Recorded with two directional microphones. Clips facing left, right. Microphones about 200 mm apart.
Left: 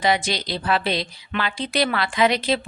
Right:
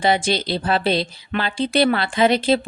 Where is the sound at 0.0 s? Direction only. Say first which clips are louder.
Right 3 dB; 30° right (ahead or behind).